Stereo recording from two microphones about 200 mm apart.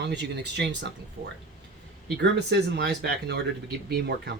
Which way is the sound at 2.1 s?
55° right (ahead or behind).